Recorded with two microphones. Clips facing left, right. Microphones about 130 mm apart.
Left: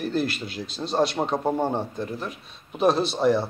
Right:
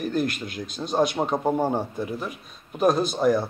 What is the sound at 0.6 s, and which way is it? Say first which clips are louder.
Speech: even; 50° right (ahead or behind).